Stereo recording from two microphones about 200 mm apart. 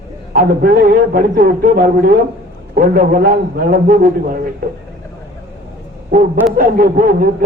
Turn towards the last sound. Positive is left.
turn(degrees=-45)  # may be behind; listen again after turning